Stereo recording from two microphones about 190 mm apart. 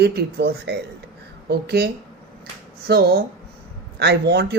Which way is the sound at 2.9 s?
55° right (ahead or behind).